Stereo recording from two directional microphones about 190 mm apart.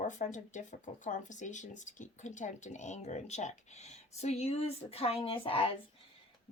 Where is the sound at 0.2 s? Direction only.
40° left (ahead or behind).